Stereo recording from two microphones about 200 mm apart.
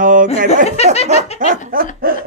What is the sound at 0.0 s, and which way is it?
Snicker, 40° right (ahead or behind).